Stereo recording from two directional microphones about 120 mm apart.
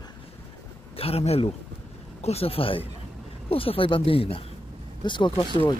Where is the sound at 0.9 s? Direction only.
55° left (ahead or behind).